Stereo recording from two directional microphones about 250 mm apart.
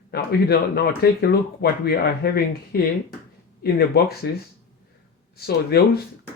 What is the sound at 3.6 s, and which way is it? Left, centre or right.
Speech, left.